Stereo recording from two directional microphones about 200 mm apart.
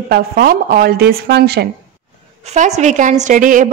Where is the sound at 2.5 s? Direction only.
35° right (ahead or behind).